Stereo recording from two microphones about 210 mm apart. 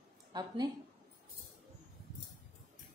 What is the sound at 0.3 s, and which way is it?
Speech, 20° right (ahead or behind).